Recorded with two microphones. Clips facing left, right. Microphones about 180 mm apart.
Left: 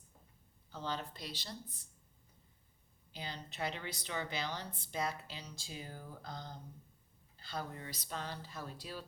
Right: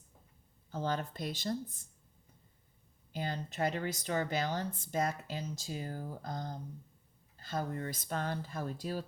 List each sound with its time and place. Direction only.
0.7 s a woman's voice: 50° right (ahead or behind)
3.1 s a woman's voice: 50° right (ahead or behind)